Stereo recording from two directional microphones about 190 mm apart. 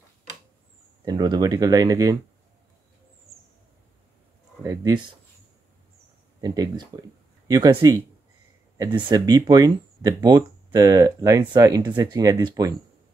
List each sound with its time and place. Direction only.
1.0 s speech: 20° right (ahead or behind)
4.6 s speech: 20° right (ahead or behind)
6.4 s speech: 20° right (ahead or behind)